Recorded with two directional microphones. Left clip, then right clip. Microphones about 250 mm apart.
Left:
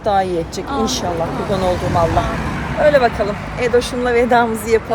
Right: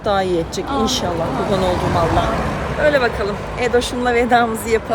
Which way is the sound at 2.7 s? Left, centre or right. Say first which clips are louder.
Left 3 dB; centre.